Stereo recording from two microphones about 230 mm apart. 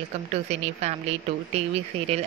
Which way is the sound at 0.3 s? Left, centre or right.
Right.